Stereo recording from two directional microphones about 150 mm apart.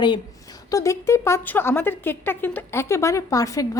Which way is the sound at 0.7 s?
20° left (ahead or behind).